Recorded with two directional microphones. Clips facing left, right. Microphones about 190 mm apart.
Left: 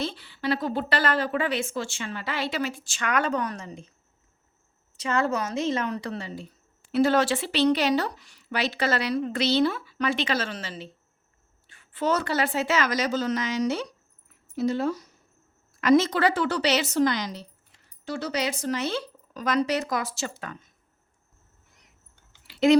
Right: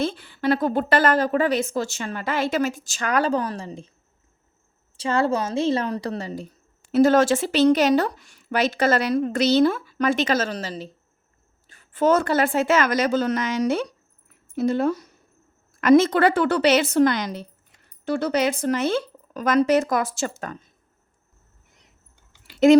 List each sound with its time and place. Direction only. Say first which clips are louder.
0.0 s speech: right 6 dB; 50° right (ahead or behind); by 3.9 s 30° right (ahead or behind)
4.9 s a woman's voice: right 4 dB; 30° right (ahead or behind)
22.4 s a sound: right 5 dB; 45° right (ahead or behind)